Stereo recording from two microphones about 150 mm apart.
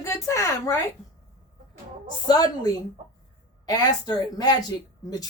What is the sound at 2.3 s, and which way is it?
Speech, 25° left (ahead or behind).